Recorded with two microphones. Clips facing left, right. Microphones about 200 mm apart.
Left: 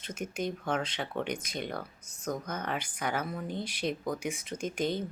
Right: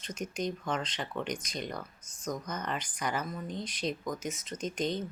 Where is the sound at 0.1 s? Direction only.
5° left (ahead or behind).